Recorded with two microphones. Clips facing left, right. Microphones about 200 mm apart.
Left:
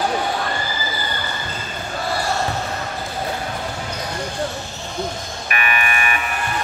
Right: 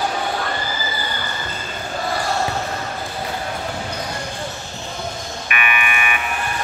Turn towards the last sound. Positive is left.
turn(degrees=35)  # may be behind; listen again after turning